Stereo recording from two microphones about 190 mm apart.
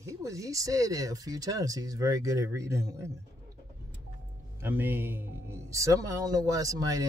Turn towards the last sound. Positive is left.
turn(degrees=-20)  # may be behind; listen again after turning